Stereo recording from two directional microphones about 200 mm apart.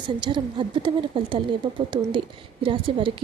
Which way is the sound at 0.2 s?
25° right (ahead or behind).